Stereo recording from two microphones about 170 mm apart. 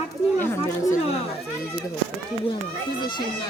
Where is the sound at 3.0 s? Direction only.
25° left (ahead or behind).